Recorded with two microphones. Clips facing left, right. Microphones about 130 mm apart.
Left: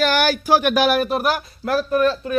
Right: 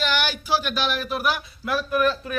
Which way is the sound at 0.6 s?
65° left (ahead or behind).